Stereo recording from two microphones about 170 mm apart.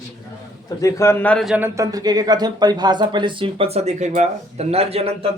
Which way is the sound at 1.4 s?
5° right (ahead or behind).